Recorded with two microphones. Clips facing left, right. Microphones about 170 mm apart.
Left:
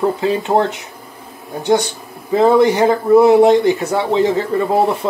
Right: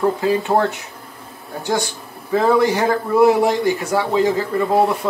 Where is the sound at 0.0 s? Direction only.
20° left (ahead or behind).